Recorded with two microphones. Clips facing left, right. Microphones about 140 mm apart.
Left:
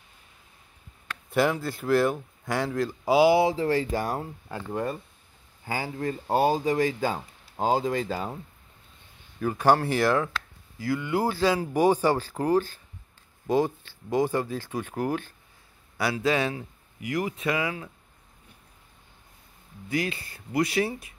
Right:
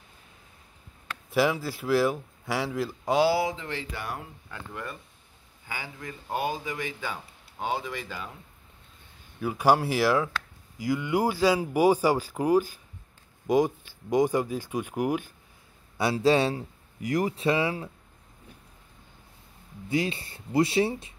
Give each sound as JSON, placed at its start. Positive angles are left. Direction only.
{"t": 1.3, "sound": "speech", "side_deg": -5}
{"t": 3.1, "sound": "speech", "side_deg": 10}
{"t": 3.3, "sound": "speech", "side_deg": 30}
{"t": 9.4, "sound": "speech", "side_deg": -10}
{"t": 16.0, "sound": "speech", "side_deg": -25}
{"t": 19.9, "sound": "speech", "side_deg": -25}